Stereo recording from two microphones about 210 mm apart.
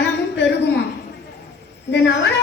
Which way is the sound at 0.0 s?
55° left (ahead or behind).